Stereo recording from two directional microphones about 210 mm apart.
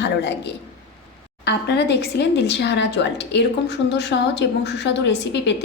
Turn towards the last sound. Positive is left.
turn(degrees=55)  # may be behind; listen again after turning